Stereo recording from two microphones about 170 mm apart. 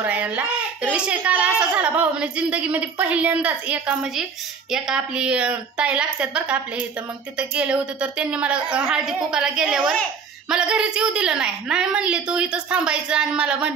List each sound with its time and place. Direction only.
0.0 s a woman's voice: 10° right (ahead or behind)